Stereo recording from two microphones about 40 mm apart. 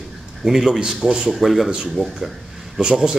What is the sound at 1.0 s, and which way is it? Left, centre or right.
Speech, right.